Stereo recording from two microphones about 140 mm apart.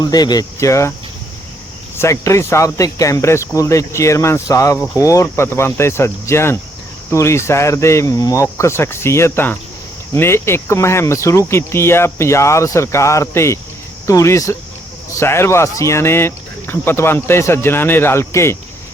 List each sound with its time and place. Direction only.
0.0 s speech: 30° left (ahead or behind)
2.0 s speech: 20° left (ahead or behind)